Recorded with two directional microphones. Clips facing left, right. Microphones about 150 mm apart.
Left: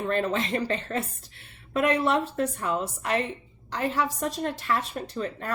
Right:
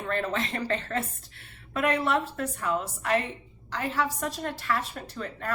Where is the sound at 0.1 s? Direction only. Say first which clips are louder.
Left 2 dB; 20° left (ahead or behind).